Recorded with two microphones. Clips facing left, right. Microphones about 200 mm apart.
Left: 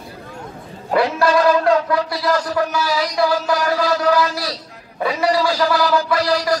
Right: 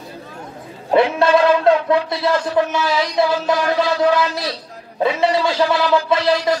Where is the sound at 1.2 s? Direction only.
20° right (ahead or behind).